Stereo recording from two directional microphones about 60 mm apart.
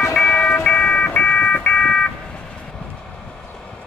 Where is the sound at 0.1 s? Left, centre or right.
Centre.